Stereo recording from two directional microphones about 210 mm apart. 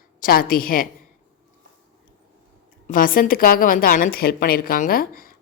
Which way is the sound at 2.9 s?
40° left (ahead or behind).